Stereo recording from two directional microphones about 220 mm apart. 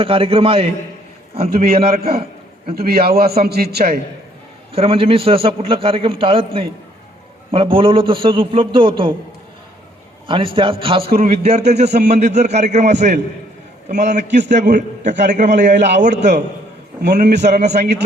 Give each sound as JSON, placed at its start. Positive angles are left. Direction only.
{"t": 0.0, "sound": "a man's voice", "side_deg": -25}
{"t": 1.9, "sound": "a man's voice", "side_deg": -45}
{"t": 4.7, "sound": "a man's voice", "side_deg": -25}
{"t": 10.2, "sound": "a man's voice", "side_deg": -25}
{"t": 17.4, "sound": "a man's voice", "side_deg": -30}